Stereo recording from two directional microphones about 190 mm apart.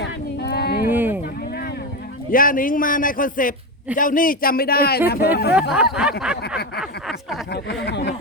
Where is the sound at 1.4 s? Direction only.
55° left (ahead or behind).